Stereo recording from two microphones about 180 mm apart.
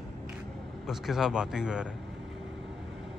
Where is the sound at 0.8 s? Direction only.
Centre (ahead or behind).